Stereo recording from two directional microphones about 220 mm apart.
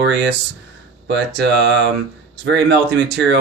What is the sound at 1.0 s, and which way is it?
Speech, 50° right (ahead or behind).